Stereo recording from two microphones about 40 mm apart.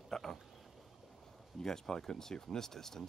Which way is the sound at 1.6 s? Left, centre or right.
Centre.